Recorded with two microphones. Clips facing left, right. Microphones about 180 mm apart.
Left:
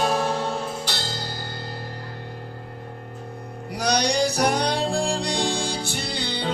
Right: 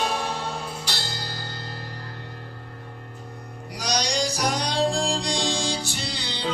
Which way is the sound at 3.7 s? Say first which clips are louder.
Left 5 dB; 60° left (ahead or behind).